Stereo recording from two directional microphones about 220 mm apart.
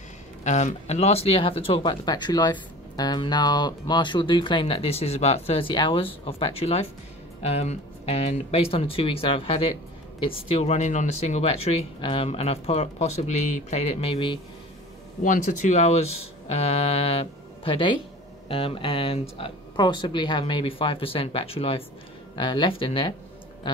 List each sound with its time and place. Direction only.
0.4 s speech: 30° left (ahead or behind)
15.2 s speech: 35° left (ahead or behind)